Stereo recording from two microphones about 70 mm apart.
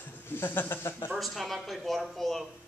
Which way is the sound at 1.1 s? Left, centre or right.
Centre.